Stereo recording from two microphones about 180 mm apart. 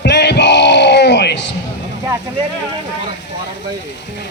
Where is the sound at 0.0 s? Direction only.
70° left (ahead or behind).